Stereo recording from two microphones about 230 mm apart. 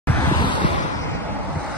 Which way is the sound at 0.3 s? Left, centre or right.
Centre.